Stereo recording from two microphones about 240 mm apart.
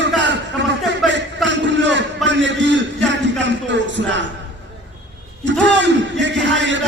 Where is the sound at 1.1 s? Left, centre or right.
Right.